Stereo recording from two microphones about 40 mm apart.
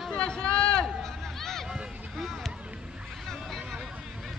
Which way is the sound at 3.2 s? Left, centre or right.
Centre.